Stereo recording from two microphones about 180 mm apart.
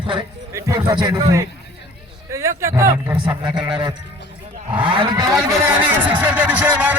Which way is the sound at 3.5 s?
25° right (ahead or behind).